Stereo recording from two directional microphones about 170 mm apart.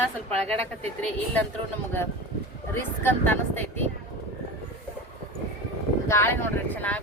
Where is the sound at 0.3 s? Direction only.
35° right (ahead or behind).